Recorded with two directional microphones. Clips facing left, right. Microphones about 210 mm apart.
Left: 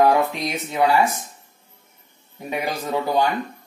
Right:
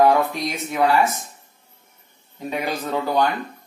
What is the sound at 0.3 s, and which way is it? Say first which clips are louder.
Speech: even; 20° left (ahead or behind).